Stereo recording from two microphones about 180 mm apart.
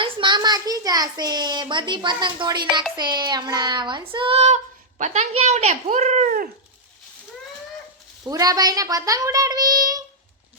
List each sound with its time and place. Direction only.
0.0 s a child's voice: 25° right (ahead or behind)
2.9 s child singing: 25° right (ahead or behind); by 6.5 s 50° right (ahead or behind)
8.2 s a child's voice: 20° right (ahead or behind)